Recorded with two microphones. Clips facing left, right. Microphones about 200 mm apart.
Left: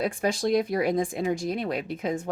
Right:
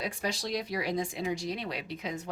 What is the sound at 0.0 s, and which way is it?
Speech, 50° left (ahead or behind).